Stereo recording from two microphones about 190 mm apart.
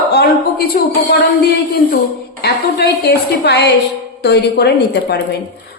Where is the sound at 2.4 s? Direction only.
60° left (ahead or behind).